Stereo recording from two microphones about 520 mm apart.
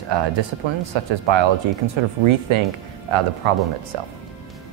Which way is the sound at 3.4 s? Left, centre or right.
Right.